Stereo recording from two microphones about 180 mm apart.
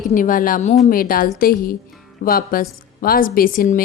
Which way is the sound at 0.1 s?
50° left (ahead or behind).